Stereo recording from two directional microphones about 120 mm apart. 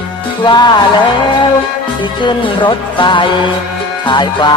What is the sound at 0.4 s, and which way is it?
Music, 35° left (ahead or behind).